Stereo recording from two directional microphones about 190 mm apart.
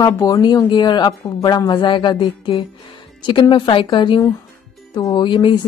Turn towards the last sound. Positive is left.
turn(degrees=25)  # may be behind; listen again after turning